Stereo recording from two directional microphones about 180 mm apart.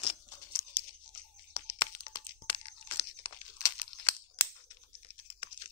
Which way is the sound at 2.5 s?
30° left (ahead or behind).